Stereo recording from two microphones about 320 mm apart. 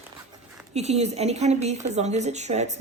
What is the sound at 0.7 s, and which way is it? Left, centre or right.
A woman's voice, centre.